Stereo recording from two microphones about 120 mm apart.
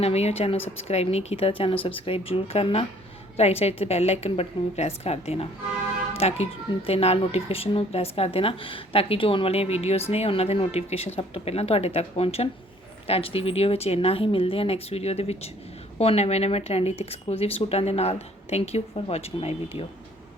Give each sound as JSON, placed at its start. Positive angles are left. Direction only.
{"t": 0.0, "sound": "a woman's voice", "side_deg": 60}